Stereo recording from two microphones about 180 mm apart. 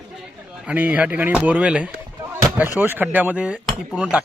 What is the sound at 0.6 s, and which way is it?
Speech, 5° right (ahead or behind).